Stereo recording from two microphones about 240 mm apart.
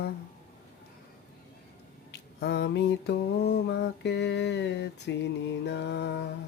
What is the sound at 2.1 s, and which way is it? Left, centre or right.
Mantra, left.